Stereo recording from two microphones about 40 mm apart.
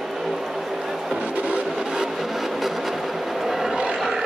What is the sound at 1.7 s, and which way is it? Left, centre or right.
Vehicle, centre.